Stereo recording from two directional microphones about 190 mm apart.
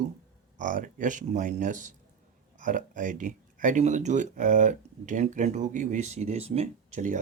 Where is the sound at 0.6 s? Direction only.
45° right (ahead or behind).